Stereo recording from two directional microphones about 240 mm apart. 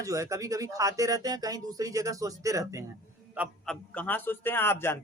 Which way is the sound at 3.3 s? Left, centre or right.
Centre.